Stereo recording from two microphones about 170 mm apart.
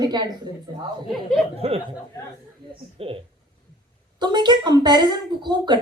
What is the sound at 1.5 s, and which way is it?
Speech, 35° right (ahead or behind).